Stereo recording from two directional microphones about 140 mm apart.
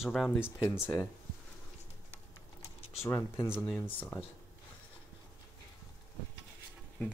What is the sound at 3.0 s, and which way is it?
Speech, 20° left (ahead or behind).